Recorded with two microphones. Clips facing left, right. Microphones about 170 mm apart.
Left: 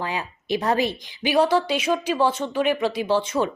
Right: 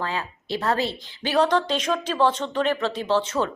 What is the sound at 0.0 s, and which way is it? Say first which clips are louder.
A woman's voice: even; 15° left (ahead or behind).